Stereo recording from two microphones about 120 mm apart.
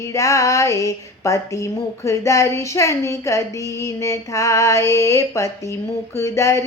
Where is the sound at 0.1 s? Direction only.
25° left (ahead or behind).